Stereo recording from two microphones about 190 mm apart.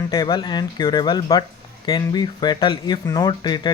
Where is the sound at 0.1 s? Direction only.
20° left (ahead or behind).